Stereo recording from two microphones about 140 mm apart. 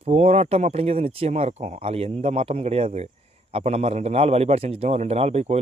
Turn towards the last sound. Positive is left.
turn(degrees=-50)  # may be behind; listen again after turning